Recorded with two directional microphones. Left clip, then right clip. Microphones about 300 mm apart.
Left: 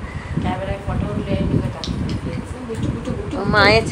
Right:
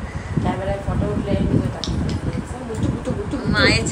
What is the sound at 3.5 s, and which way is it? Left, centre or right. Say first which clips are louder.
Speech: left 4 dB; centre.